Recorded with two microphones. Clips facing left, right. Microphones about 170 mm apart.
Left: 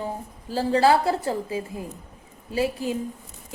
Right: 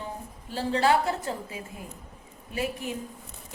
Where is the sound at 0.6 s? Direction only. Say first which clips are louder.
Left 4 dB; 35° left (ahead or behind).